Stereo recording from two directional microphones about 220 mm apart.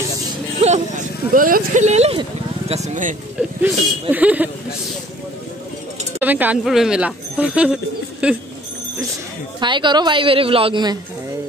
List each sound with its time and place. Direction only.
0.6 s speech: 30° right (ahead or behind)
4.1 s speech: 5° right (ahead or behind)
6.2 s speech: 10° right (ahead or behind)
9.6 s a woman's voice: 20° right (ahead or behind)